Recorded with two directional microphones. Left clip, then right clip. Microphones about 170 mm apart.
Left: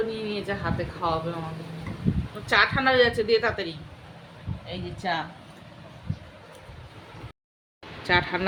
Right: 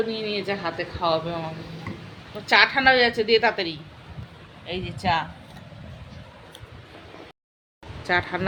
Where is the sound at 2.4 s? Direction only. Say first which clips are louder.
Right 4 dB; 20° right (ahead or behind).